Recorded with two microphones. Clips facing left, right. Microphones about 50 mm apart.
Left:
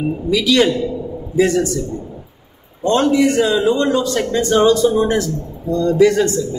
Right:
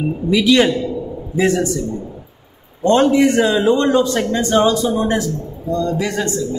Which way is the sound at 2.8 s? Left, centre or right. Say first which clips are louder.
Right 2 dB; right.